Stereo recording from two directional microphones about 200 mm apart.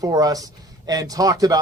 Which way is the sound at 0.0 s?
20° right (ahead or behind).